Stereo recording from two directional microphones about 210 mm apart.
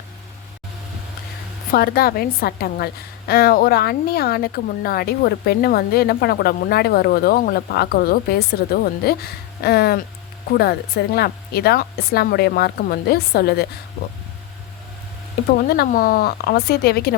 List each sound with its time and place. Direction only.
1.7 s a woman's voice: 45° left (ahead or behind)
15.5 s a woman's voice: 45° left (ahead or behind)